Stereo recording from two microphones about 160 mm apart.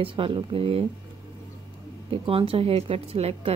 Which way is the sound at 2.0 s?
35° right (ahead or behind).